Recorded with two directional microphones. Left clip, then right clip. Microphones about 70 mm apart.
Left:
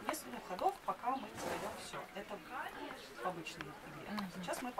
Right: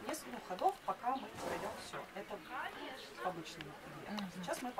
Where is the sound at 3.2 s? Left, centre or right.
Right.